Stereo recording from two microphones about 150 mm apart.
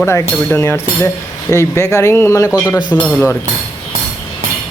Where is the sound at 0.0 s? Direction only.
15° left (ahead or behind).